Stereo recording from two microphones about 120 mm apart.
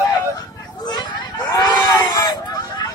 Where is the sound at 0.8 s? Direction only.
35° left (ahead or behind).